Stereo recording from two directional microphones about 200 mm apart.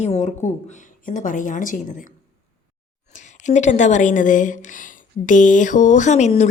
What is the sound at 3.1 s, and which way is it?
A woman's voice, 40° left (ahead or behind).